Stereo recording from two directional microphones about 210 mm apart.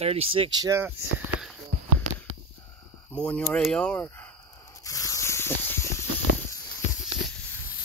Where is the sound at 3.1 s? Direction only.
5° left (ahead or behind).